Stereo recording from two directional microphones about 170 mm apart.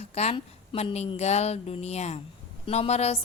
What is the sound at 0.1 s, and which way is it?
A woman's voice, 35° left (ahead or behind).